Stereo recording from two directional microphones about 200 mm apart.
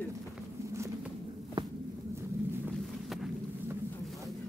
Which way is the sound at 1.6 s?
25° right (ahead or behind).